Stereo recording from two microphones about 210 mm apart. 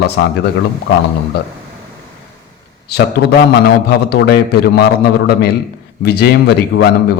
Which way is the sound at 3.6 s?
50° left (ahead or behind).